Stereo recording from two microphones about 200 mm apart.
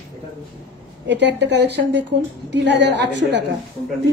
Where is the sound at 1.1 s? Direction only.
60° right (ahead or behind).